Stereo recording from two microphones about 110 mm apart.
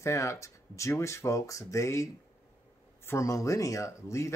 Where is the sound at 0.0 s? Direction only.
25° left (ahead or behind).